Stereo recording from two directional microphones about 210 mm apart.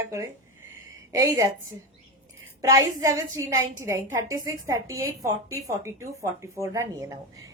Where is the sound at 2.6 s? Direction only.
15° right (ahead or behind).